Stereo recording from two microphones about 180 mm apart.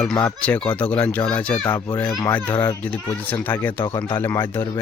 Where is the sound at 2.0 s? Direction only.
20° left (ahead or behind).